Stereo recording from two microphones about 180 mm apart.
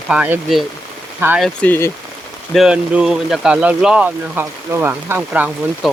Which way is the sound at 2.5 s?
5° right (ahead or behind).